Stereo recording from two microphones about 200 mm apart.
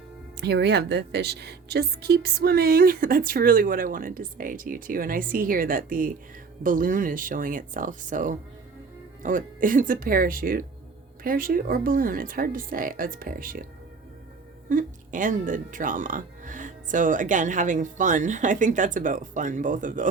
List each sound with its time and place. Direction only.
0.3 s a woman's voice: 60° right (ahead or behind)
14.7 s speech: 40° right (ahead or behind)